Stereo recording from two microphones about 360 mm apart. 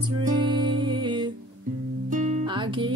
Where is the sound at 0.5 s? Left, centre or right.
Centre.